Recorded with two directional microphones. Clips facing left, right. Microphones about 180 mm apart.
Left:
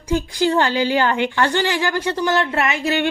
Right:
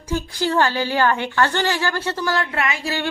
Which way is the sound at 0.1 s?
20° left (ahead or behind).